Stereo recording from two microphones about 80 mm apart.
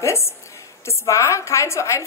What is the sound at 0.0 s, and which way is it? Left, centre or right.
A woman's voice, left.